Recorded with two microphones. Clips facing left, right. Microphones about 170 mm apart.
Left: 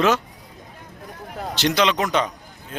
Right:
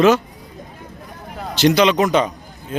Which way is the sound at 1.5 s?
5° right (ahead or behind).